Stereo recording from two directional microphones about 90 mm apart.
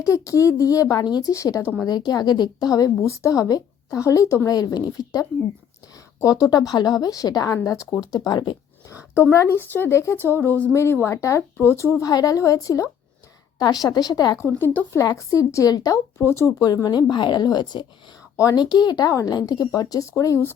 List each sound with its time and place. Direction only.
0.0 s speech: 35° left (ahead or behind)
1.3 s speech: 40° left (ahead or behind)
2.0 s speech: 50° left (ahead or behind); by 4.5 s 35° left (ahead or behind)
4.5 s speech: 50° left (ahead or behind)
6.4 s speech: 45° left (ahead or behind)
8.1 s speech: 50° left (ahead or behind)
9.1 s speech: 30° left (ahead or behind); by 14.3 s 45° left (ahead or behind)
14.3 s speech: 25° left (ahead or behind)
14.9 s speech: 35° left (ahead or behind)
16.1 s speech: 30° left (ahead or behind)